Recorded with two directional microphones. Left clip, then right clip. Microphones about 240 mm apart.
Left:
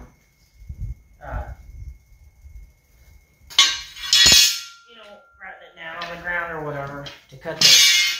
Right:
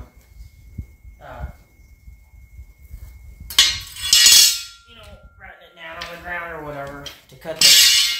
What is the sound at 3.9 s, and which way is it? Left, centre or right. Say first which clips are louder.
Music: right 1 dB; right.